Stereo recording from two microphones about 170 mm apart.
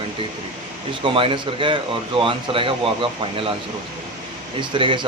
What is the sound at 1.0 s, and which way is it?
A man's voice, 30° right (ahead or behind).